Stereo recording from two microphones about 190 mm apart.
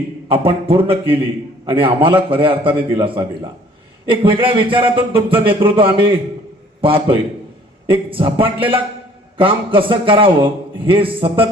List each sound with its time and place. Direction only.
0.3 s a man's voice: 30° right (ahead or behind)